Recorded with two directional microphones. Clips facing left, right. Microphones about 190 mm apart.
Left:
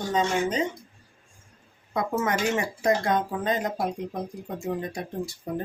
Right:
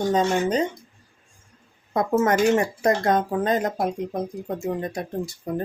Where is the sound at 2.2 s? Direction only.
45° right (ahead or behind).